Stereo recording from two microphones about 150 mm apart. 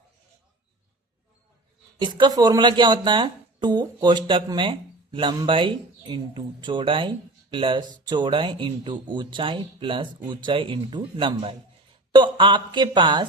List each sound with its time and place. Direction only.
2.0 s speech: 30° right (ahead or behind)